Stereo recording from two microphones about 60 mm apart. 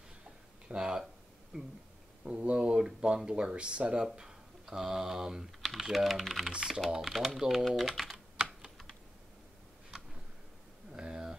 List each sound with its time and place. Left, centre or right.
0.7 s speech: centre
7.1 s speech: centre
8.1 s typing: centre
10.9 s a sound: centre